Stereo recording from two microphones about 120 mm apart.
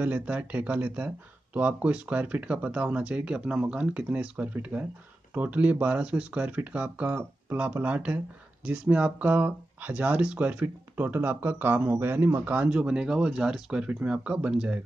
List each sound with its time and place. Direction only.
0.0 s speech: 15° right (ahead or behind)